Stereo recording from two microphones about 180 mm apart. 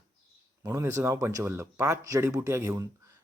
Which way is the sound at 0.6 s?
15° right (ahead or behind).